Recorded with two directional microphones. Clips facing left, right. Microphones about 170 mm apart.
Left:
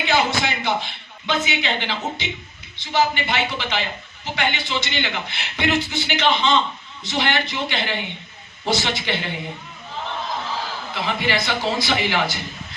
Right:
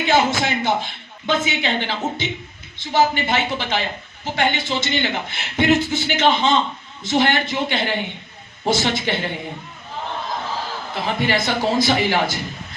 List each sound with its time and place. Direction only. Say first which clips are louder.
0.1 s a man's voice: right 3 dB; 45° right (ahead or behind)
10.9 s a man's voice: right 2 dB; 45° right (ahead or behind)